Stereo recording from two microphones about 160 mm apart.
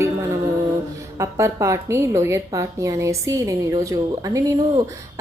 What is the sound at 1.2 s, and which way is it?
A woman's voice, 15° right (ahead or behind).